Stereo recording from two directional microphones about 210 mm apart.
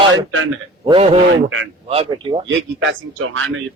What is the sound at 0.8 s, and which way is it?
Speech, 30° right (ahead or behind).